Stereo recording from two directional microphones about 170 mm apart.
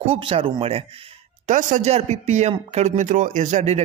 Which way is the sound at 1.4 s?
50° right (ahead or behind).